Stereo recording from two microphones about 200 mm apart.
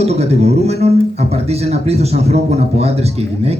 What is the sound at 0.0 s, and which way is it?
Speech, 30° right (ahead or behind).